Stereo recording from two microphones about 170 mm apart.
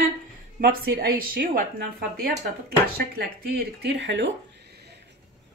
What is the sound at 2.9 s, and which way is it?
Speech, 65° right (ahead or behind).